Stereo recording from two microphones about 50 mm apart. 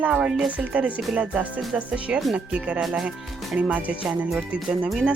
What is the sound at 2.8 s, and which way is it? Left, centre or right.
Speech, centre.